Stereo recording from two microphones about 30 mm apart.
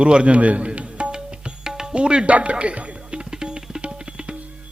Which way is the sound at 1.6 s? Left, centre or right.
Centre.